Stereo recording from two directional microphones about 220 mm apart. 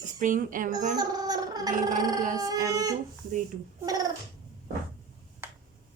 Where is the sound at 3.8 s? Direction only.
15° right (ahead or behind).